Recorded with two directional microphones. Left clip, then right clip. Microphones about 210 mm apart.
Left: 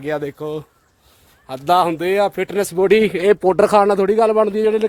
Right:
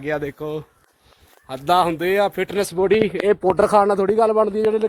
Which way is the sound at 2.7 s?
60° left (ahead or behind).